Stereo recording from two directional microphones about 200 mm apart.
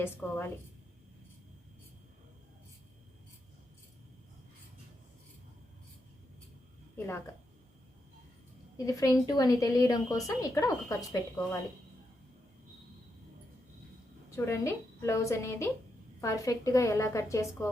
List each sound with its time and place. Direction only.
0.0 s a woman's voice: 10° left (ahead or behind)
8.8 s a woman's voice: 15° left (ahead or behind)
14.3 s a woman's voice: 15° left (ahead or behind)